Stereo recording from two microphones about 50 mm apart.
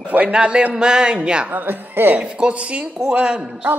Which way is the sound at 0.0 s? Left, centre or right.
Right.